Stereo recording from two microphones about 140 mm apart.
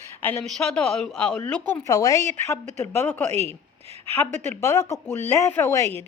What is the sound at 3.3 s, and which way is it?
Speech, 50° right (ahead or behind).